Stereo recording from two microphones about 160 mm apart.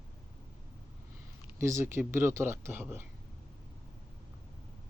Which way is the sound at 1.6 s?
15° right (ahead or behind).